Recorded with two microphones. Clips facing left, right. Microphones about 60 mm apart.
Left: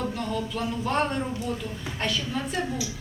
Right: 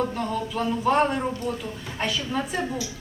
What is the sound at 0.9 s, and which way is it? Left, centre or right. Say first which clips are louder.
A woman's voice: right 5 dB; centre.